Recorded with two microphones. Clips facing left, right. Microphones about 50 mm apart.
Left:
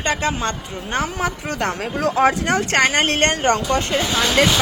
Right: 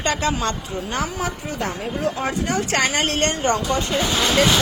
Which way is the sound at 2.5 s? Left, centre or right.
Left.